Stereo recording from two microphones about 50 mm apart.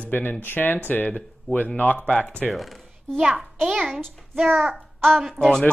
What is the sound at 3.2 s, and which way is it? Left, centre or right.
Speech, centre.